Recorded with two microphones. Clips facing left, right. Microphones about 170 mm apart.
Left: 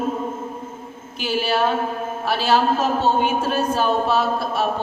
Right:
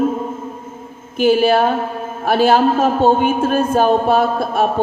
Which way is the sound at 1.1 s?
50° right (ahead or behind).